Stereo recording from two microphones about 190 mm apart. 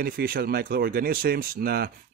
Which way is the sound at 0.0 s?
50° right (ahead or behind).